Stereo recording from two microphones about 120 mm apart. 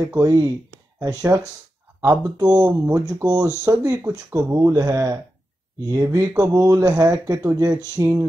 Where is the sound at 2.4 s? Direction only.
30° right (ahead or behind).